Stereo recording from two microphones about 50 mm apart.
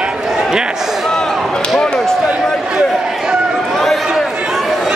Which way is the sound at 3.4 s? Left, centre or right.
Centre.